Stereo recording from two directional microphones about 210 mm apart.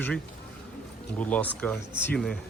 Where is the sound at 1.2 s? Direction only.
5° left (ahead or behind).